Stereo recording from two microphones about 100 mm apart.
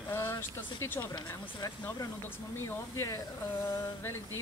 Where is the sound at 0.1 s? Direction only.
25° left (ahead or behind).